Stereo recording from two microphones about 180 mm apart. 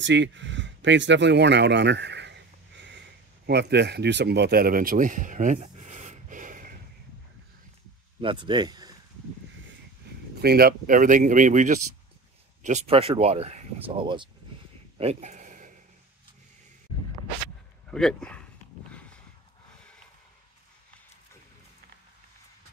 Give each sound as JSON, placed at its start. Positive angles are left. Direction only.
{"t": 0.0, "sound": "speech", "side_deg": -85}
{"t": 8.2, "sound": "speech", "side_deg": -25}
{"t": 10.4, "sound": "speech", "side_deg": -60}
{"t": 15.0, "sound": "a sound", "side_deg": -35}
{"t": 17.9, "sound": "speech", "side_deg": 5}